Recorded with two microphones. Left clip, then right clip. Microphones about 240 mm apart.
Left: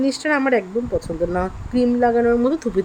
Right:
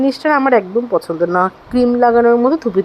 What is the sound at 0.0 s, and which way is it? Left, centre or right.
Speech, centre.